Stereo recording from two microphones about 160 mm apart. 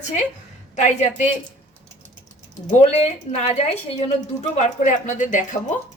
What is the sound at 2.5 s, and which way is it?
A woman's voice, 45° left (ahead or behind).